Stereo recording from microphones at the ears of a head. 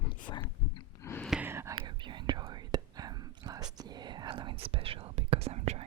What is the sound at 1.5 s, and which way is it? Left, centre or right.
Whispering, right.